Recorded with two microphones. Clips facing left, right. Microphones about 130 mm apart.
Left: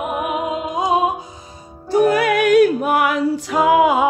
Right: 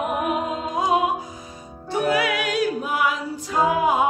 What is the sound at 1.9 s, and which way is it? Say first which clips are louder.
Music: left 7 dB; 45° left (ahead or behind).